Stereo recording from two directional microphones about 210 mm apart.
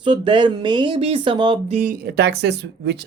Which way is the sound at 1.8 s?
40° right (ahead or behind).